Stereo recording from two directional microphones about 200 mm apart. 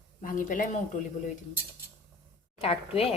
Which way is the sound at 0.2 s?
40° left (ahead or behind).